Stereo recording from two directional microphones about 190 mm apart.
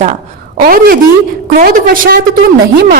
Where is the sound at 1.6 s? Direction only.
50° right (ahead or behind).